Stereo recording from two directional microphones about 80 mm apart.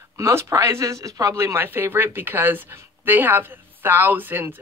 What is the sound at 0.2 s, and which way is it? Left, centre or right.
Speech, right.